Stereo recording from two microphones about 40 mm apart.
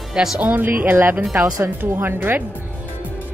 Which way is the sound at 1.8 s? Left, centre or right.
Right.